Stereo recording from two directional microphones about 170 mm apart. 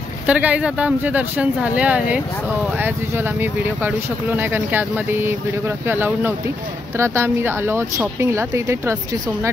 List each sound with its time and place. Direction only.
0.3 s speech: 10° right (ahead or behind)